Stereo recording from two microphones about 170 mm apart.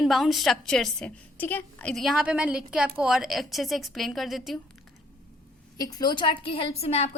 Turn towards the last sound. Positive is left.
turn(degrees=35)  # may be behind; listen again after turning